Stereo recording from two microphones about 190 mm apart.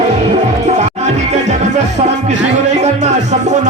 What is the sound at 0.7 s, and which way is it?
Music, 35° right (ahead or behind).